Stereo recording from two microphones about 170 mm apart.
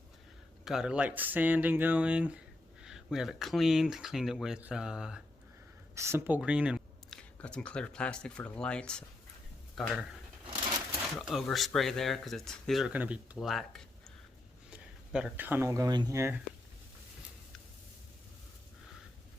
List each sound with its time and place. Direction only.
0.6 s speech: 5° right (ahead or behind)
5.9 s speech: 15° right (ahead or behind)
7.4 s speech: 5° left (ahead or behind)
11.2 s speech: centre (ahead or behind); by 16.3 s 20° right (ahead or behind)